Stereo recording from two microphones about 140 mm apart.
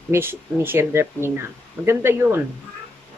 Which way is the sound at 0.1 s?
15° right (ahead or behind).